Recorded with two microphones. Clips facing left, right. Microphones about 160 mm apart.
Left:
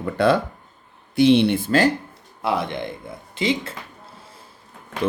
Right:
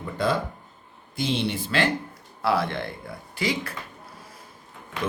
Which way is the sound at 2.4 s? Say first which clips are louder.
Left 1 dB; 20° left (ahead or behind).